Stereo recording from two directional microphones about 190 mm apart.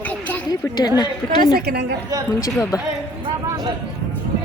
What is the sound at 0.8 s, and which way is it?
Speech, 20° left (ahead or behind).